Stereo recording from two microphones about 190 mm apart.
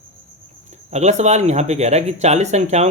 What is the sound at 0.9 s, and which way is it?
Speech, 35° right (ahead or behind).